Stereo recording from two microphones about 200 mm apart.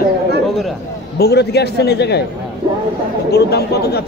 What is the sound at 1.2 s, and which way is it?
A man's voice, 55° left (ahead or behind).